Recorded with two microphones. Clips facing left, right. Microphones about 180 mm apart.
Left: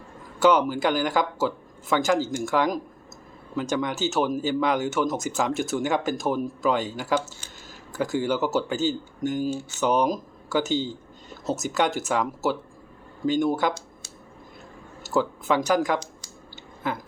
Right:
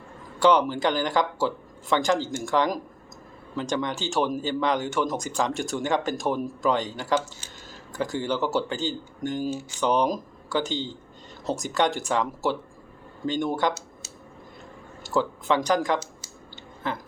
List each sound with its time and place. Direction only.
0.3 s speech: 5° left (ahead or behind)
15.1 s speech: 10° left (ahead or behind)